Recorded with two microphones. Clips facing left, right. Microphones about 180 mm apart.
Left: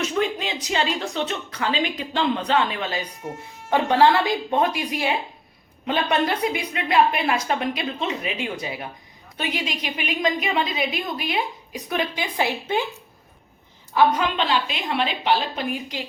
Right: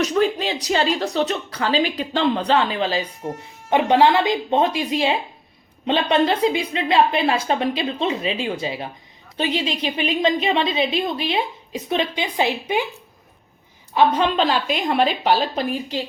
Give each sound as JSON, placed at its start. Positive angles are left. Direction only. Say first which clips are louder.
{"t": 0.0, "sound": "a woman's voice", "louder": "right 5 dB", "side_deg": -35}
{"t": 13.9, "sound": "speech", "louder": "right 2 dB", "side_deg": -25}